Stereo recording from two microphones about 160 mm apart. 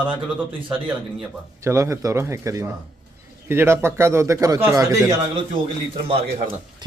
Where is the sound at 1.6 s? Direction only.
20° right (ahead or behind).